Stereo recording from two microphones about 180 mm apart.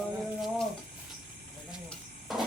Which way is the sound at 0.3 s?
Centre (ahead or behind).